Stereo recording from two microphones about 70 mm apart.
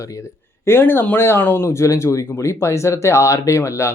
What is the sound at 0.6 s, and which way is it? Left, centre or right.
Speech, left.